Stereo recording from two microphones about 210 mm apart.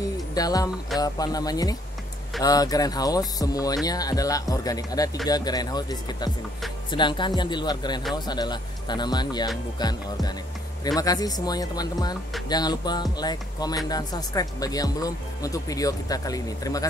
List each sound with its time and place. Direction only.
0.0 s music: 15° left (ahead or behind)
0.9 s speech: 20° left (ahead or behind)